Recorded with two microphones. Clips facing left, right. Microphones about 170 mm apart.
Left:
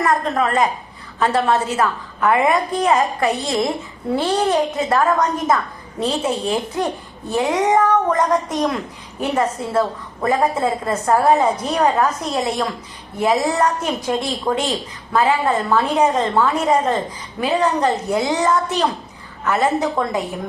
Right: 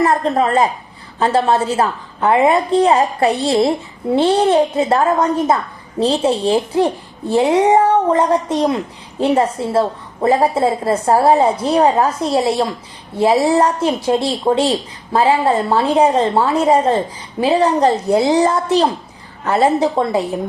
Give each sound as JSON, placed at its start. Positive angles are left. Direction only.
{"t": 0.0, "sound": "a woman's voice", "side_deg": -30}